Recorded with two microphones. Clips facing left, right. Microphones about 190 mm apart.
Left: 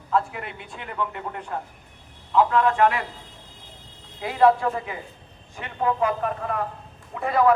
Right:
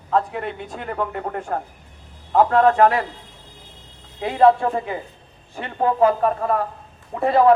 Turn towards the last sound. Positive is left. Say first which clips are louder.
# right 5 dB
turn(degrees=-30)  # may be behind; listen again after turning